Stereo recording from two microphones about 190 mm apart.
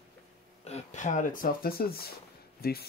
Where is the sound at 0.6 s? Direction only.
35° left (ahead or behind).